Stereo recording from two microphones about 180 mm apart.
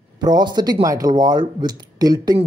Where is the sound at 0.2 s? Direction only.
25° right (ahead or behind).